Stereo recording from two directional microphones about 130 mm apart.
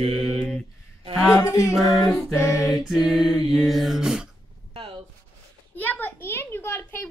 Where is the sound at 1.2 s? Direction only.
25° left (ahead or behind).